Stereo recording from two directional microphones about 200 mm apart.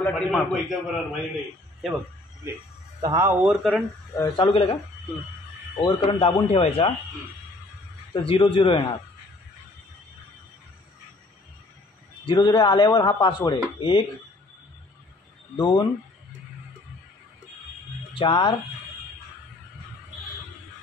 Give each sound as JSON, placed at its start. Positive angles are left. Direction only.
{"t": 0.0, "sound": "a man's voice", "side_deg": 0}
{"t": 3.0, "sound": "speech", "side_deg": -15}
{"t": 3.4, "sound": "a man's voice", "side_deg": 0}
{"t": 4.4, "sound": "speech", "side_deg": 25}
{"t": 5.8, "sound": "speech", "side_deg": 25}
{"t": 8.1, "sound": "speech", "side_deg": 25}
{"t": 12.3, "sound": "speech", "side_deg": 25}
{"t": 15.5, "sound": "speech", "side_deg": 25}
{"t": 18.1, "sound": "speech", "side_deg": 30}